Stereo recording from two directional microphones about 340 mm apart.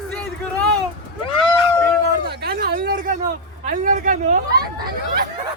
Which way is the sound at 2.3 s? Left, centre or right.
Right.